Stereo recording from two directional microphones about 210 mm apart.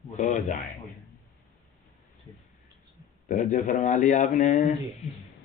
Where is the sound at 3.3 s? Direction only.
40° left (ahead or behind).